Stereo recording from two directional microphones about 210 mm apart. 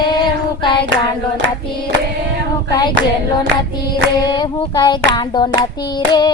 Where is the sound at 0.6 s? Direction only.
25° left (ahead or behind).